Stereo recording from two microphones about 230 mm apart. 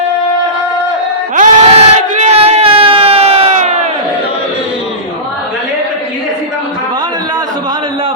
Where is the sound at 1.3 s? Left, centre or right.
Right.